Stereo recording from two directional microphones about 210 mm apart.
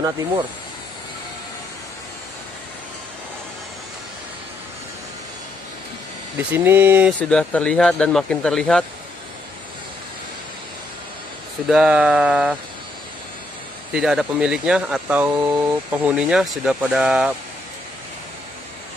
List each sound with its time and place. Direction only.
0.0 s speech: 15° right (ahead or behind)
6.3 s speech: 10° right (ahead or behind)
7.2 s speech: 5° left (ahead or behind)
11.6 s speech: 5° right (ahead or behind)
13.9 s speech: 5° right (ahead or behind)